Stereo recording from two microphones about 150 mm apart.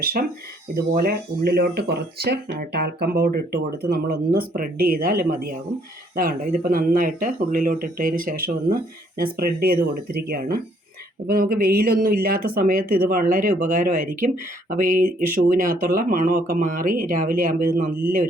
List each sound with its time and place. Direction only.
0.0 s speech: 85° right
11.3 s speech: 70° right (ahead or behind)